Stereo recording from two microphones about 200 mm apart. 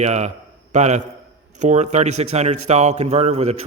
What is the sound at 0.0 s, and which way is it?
A man's voice, 35° right (ahead or behind).